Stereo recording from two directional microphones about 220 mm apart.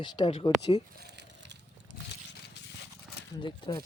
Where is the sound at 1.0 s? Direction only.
50° right (ahead or behind).